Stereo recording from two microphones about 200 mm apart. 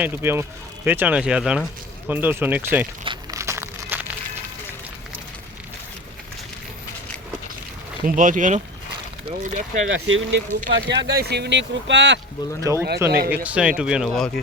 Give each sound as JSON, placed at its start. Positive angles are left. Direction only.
{"t": 0.0, "sound": "speech", "side_deg": -10}
{"t": 3.0, "sound": "crumpling", "side_deg": -25}
{"t": 3.4, "sound": "a sound", "side_deg": -15}
{"t": 8.0, "sound": "speech", "side_deg": -40}
{"t": 9.9, "sound": "speech", "side_deg": -75}
{"t": 12.7, "sound": "speech", "side_deg": -15}
{"t": 13.1, "sound": "speech", "side_deg": -50}
{"t": 13.3, "sound": "speech", "side_deg": -5}